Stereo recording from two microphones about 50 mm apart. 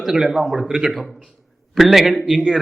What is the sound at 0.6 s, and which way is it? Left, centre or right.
Speech, centre.